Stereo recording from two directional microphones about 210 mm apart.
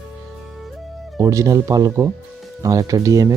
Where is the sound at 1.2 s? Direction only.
15° right (ahead or behind).